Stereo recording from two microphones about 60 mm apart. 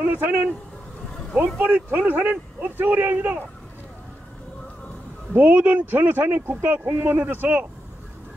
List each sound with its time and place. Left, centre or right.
0.0 s speech: right
1.7 s a man's voice: right
5.3 s a man's voice: right